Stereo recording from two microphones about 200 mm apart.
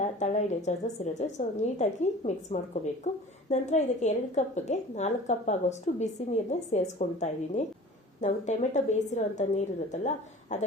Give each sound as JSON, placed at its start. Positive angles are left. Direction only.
{"t": 0.0, "sound": "a woman's voice", "side_deg": 35}